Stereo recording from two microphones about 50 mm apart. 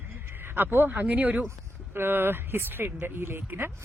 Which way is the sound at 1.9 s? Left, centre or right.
Right.